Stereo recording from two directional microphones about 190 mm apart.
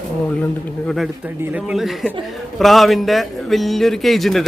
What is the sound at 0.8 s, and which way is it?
A man's voice, centre (ahead or behind).